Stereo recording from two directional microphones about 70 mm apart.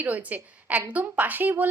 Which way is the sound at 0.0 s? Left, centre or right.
Right.